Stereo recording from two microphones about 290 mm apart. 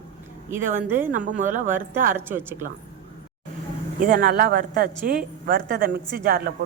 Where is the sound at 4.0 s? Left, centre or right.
Right.